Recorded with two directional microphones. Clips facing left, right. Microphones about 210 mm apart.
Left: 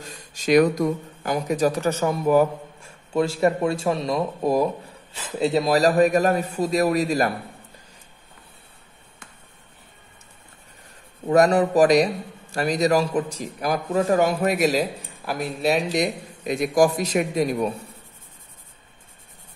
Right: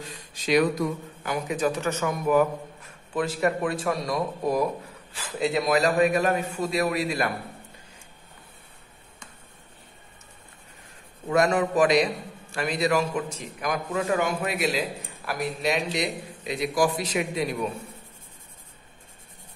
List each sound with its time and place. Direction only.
0.0 s speech: 45° left (ahead or behind)
11.2 s a man's voice: 35° left (ahead or behind)